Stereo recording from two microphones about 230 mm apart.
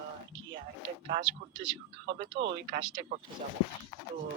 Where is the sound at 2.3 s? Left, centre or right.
Right.